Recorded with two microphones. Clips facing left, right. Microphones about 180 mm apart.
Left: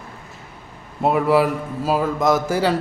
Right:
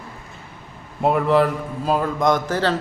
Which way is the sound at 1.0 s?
5° left (ahead or behind).